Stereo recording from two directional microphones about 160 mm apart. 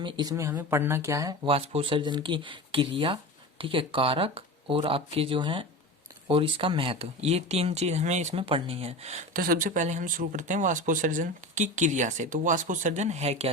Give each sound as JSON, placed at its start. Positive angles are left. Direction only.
{"t": 0.0, "sound": "speech", "side_deg": -25}
{"t": 1.5, "sound": "speech", "side_deg": -35}
{"t": 9.3, "sound": "speech", "side_deg": -65}